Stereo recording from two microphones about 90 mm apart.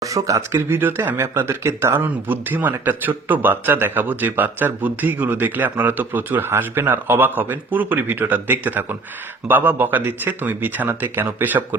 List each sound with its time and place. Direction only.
0.0 s speech: 40° right (ahead or behind)
0.7 s speech: 25° right (ahead or behind)